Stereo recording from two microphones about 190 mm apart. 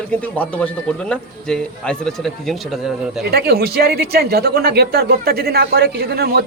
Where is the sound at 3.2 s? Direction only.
55° right (ahead or behind).